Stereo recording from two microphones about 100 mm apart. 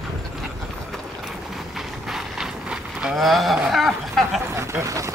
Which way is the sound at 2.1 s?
5° right (ahead or behind).